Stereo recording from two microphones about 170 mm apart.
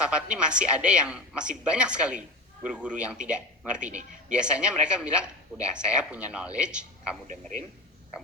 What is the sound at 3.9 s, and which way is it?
Speech, 45° right (ahead or behind).